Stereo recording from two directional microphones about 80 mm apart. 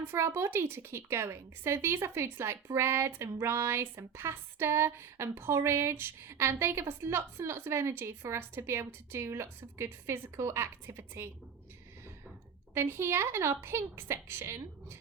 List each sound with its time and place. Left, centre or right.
0.0 s a woman's voice: right
12.7 s a woman's voice: right